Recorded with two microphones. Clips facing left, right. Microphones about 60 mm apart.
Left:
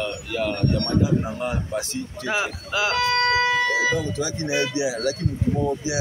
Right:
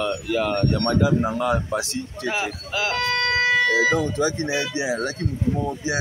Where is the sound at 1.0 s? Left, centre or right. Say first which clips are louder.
Right 4 dB; right.